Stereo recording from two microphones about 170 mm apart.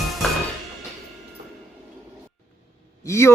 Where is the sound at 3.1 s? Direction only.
15° left (ahead or behind).